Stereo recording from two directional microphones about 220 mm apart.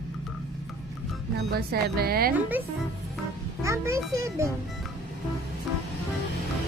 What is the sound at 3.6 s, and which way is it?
Speech, 15° right (ahead or behind).